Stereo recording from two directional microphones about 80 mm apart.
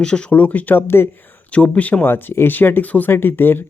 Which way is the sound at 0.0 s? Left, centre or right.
Centre.